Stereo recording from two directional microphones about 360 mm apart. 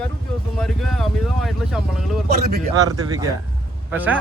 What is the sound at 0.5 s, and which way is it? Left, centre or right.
A man's voice, centre.